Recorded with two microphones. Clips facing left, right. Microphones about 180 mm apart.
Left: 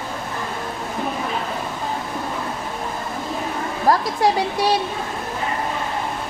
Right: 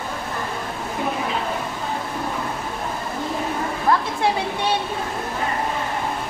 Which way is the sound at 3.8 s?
35° left (ahead or behind).